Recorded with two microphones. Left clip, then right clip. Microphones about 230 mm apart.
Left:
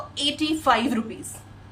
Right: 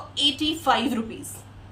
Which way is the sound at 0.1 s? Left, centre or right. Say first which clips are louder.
Right 2 dB; centre.